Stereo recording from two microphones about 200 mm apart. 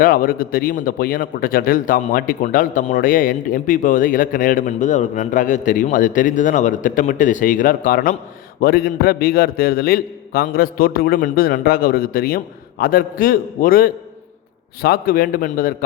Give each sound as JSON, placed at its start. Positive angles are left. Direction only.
{"t": 0.0, "sound": "a man's voice", "side_deg": 45}